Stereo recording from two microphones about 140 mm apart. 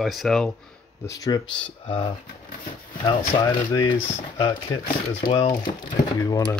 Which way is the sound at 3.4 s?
30° left (ahead or behind).